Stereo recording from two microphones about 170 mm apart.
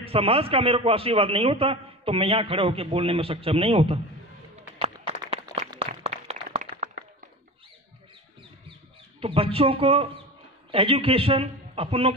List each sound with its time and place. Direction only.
0.0 s a man's voice: 35° right (ahead or behind)
4.6 s a sound: 40° right (ahead or behind)
6.0 s clapping: 40° right (ahead or behind)
9.2 s a man's voice: 35° right (ahead or behind)